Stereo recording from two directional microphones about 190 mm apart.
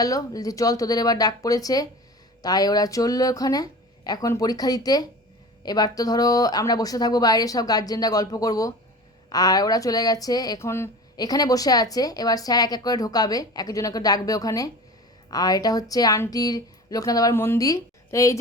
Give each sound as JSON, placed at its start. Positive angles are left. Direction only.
{"t": 0.0, "sound": "speech", "side_deg": 20}